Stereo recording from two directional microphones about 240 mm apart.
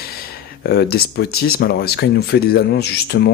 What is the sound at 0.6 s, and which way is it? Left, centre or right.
Speech, left.